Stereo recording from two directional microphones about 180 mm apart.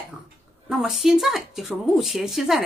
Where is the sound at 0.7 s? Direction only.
Centre (ahead or behind).